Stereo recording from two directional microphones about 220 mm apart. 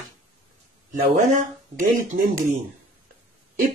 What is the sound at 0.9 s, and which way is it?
Speech, 35° right (ahead or behind).